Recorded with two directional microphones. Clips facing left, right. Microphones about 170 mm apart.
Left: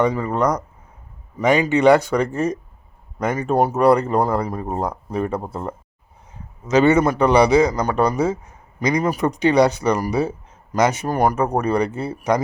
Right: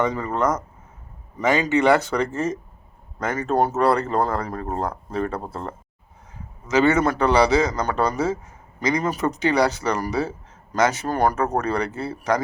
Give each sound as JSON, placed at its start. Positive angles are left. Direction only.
{"t": 0.0, "sound": "a man's voice", "side_deg": 10}